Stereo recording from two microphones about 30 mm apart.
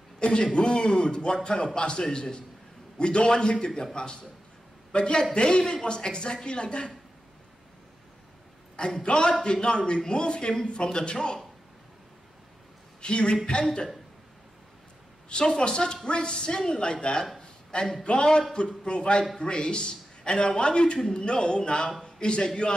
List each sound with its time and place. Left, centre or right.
0.2 s a man's voice: left
5.6 s a man's voice: left
9.0 s a man's voice: left
13.0 s a man's voice: left
15.2 s a man's voice: left
17.4 s a sound: left
18.0 s a man's voice: left